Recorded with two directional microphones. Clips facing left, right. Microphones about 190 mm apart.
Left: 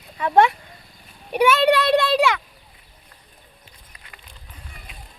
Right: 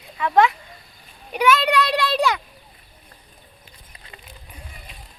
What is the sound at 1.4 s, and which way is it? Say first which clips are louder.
Child singing: left 2 dB; 30° left (ahead or behind).